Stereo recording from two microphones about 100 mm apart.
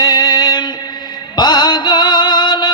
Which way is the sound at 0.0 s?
45° left (ahead or behind).